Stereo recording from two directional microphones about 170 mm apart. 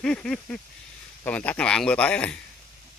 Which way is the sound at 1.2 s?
10° left (ahead or behind).